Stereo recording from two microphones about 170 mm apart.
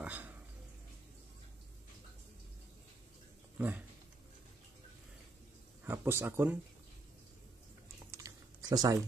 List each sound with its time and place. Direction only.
0.0 s a sound: 10° right (ahead or behind)
3.5 s speech: 10° right (ahead or behind)
5.9 s speech: 15° right (ahead or behind)
8.1 s typing: 20° right (ahead or behind)